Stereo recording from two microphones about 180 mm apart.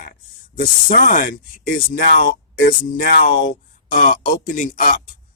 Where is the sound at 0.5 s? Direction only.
45° left (ahead or behind).